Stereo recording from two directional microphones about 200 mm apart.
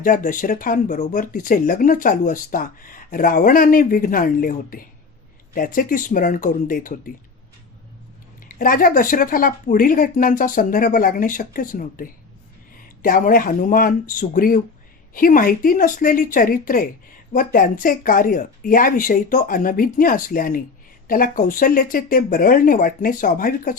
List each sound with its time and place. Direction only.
0.0 s speech: 40° left (ahead or behind)
8.4 s speech: 45° left (ahead or behind)